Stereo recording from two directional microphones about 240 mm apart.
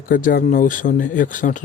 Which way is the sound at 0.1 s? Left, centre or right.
Left.